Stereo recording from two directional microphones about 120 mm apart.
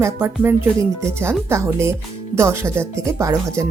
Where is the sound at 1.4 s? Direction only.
20° right (ahead or behind).